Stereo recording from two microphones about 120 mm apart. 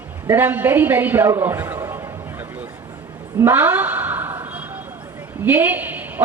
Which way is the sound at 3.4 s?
20° right (ahead or behind).